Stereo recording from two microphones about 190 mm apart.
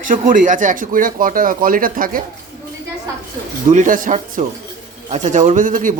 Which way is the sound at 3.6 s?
45° right (ahead or behind).